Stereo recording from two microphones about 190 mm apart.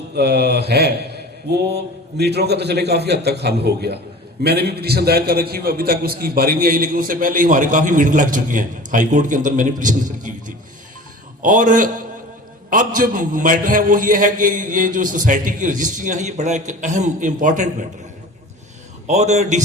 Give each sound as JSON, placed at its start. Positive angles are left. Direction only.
{"t": 0.2, "sound": "a man's voice", "side_deg": -60}
{"t": 19.0, "sound": "a man's voice", "side_deg": -35}